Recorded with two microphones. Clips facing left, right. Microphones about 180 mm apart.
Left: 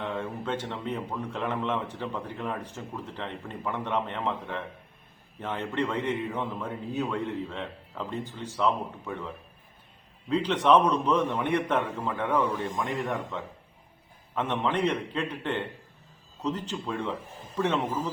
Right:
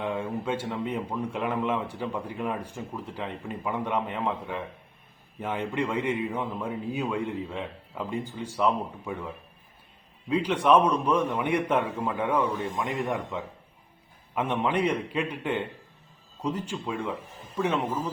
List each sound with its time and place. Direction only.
0.0 s a man's voice: 10° right (ahead or behind)